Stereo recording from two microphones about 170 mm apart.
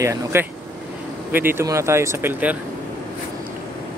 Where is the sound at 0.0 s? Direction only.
15° right (ahead or behind).